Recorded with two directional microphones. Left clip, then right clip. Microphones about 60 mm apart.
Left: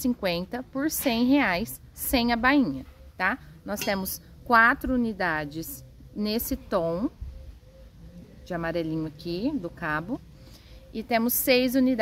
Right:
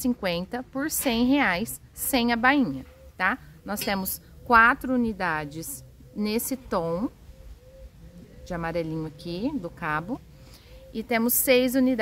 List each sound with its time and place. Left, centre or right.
0.2 s a woman's voice: right
8.5 s a woman's voice: right